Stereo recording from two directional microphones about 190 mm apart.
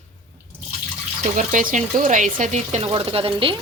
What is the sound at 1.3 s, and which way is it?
Speech, 45° right (ahead or behind).